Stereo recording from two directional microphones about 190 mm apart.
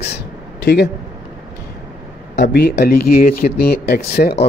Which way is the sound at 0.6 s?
60° left (ahead or behind).